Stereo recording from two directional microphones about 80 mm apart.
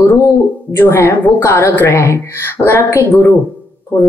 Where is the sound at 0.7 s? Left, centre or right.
Left.